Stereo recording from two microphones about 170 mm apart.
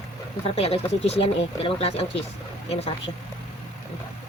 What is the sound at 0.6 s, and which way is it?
Speech, 35° left (ahead or behind).